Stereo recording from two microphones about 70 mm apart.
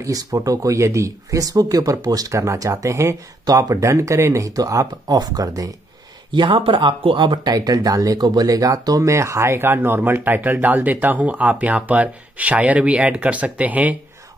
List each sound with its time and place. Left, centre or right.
0.0 s speech: right
7.4 s speech: right